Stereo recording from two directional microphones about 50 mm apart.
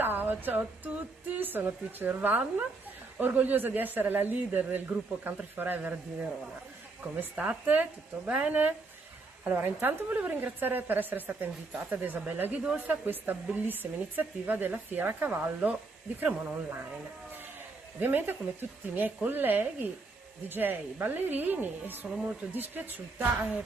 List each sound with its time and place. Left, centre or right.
0.0 s speech: right
7.3 s speech: right
17.9 s speech: right